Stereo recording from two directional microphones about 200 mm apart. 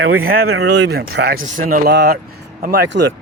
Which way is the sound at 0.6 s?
60° right (ahead or behind).